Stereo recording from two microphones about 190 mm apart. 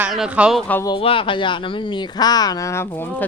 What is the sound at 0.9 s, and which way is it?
Speech, 30° left (ahead or behind).